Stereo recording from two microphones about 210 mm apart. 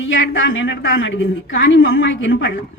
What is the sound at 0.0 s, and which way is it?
A woman's voice, 65° left (ahead or behind).